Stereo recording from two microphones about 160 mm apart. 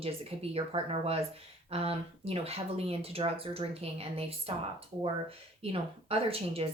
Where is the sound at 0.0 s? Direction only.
35° right (ahead or behind).